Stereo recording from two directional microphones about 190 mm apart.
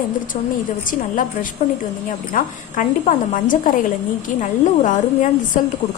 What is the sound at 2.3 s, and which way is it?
A woman's voice, 45° left (ahead or behind).